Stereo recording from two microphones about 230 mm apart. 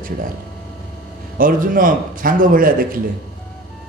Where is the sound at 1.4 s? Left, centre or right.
Right.